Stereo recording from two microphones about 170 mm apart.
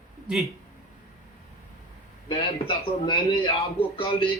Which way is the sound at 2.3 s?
30° left (ahead or behind).